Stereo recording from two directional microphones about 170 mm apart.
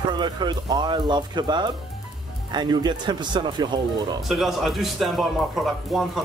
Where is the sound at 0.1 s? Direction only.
25° right (ahead or behind).